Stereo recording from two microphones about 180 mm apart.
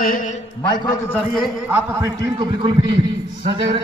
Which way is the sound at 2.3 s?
30° right (ahead or behind).